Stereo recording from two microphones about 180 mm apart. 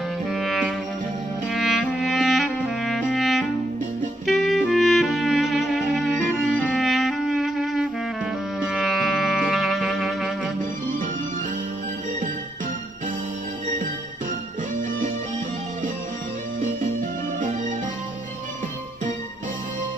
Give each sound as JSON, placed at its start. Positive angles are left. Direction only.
{"t": 0.3, "sound": "music", "side_deg": 0}
{"t": 1.5, "sound": "clarinet", "side_deg": 0}
{"t": 4.3, "sound": "music", "side_deg": 0}